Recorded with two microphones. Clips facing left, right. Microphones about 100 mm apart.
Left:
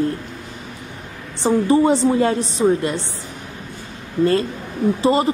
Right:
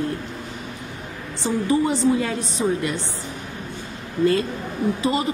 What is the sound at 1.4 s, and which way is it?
A woman's voice, 35° left (ahead or behind).